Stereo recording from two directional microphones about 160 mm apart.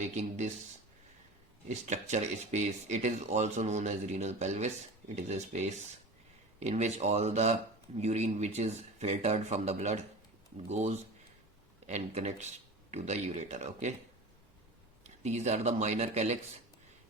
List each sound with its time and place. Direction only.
0.2 s speech: 45° right (ahead or behind)
1.6 s speech: 45° right (ahead or behind)
15.0 s speech: 45° right (ahead or behind)